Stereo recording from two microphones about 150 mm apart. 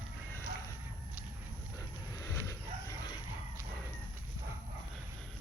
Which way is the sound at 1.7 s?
20° left (ahead or behind).